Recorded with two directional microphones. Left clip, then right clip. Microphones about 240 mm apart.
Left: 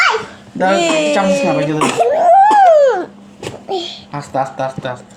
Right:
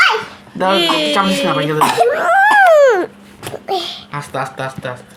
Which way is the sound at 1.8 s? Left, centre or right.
Right.